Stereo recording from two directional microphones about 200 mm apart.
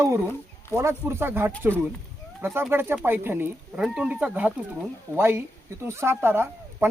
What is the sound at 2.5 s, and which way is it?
Speech, 10° right (ahead or behind).